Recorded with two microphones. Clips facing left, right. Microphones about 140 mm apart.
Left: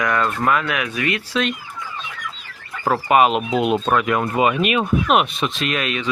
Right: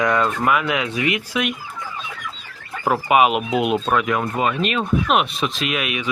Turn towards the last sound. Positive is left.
turn(degrees=-10)  # may be behind; listen again after turning